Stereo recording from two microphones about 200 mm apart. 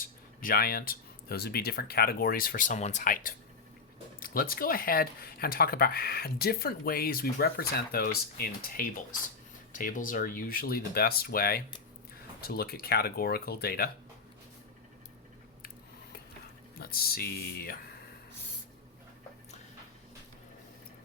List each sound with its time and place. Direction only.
0.0 s speech: 45° left (ahead or behind)
16.7 s speech: 50° left (ahead or behind)